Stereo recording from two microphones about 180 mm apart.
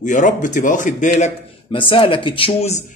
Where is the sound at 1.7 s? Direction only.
30° left (ahead or behind).